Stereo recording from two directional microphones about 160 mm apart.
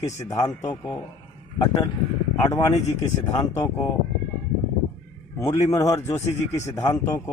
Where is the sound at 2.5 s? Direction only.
20° left (ahead or behind).